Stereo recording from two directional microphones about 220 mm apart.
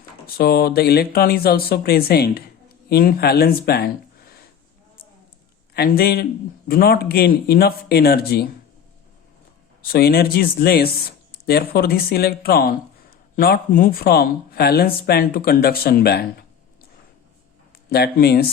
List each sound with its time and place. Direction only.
0.3 s speech: 45° left (ahead or behind)
5.7 s speech: 45° left (ahead or behind)
9.8 s speech: 45° left (ahead or behind)
17.8 s speech: 45° left (ahead or behind)